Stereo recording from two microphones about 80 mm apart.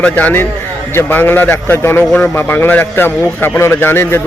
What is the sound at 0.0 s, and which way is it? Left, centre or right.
A man's voice, left.